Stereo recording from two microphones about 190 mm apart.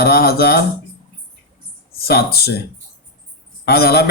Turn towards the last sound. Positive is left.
turn(degrees=55)  # may be behind; listen again after turning